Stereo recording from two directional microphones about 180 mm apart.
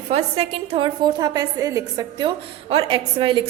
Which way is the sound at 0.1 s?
35° right (ahead or behind).